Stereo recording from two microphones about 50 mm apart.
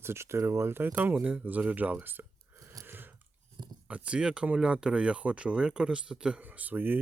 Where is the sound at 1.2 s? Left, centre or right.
Right.